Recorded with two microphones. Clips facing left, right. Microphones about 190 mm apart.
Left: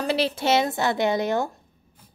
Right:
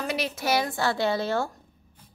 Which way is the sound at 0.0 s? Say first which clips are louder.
Left 5 dB; 30° left (ahead or behind).